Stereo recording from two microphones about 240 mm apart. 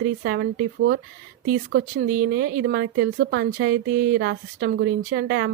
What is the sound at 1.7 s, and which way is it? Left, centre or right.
Speech, right.